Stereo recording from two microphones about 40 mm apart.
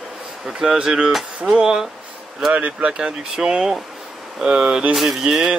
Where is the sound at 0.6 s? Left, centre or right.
Centre; by 2.9 s right.